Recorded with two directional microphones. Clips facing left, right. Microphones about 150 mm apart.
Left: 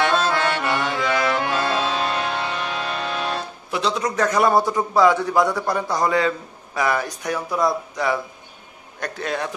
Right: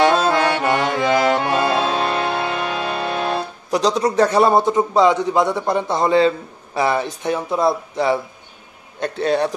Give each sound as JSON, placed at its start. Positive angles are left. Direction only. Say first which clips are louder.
{"t": 0.1, "sound": "music", "louder": "right 4 dB", "side_deg": -15}
{"t": 0.4, "sound": "music", "louder": "right 4 dB", "side_deg": -45}
{"t": 1.0, "sound": "accordion", "louder": "right 6 dB", "side_deg": -40}
{"t": 2.0, "sound": "music", "louder": "right 4 dB", "side_deg": -35}
{"t": 3.7, "sound": "a man's voice", "louder": "right 6 dB", "side_deg": -35}